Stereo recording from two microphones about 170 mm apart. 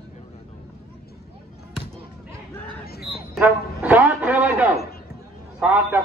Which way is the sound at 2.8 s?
65° left (ahead or behind).